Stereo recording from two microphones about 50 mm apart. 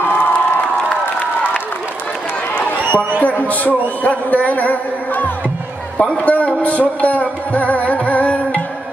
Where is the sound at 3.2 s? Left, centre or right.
Left.